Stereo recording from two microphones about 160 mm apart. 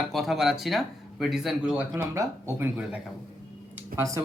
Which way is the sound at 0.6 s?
Centre (ahead or behind).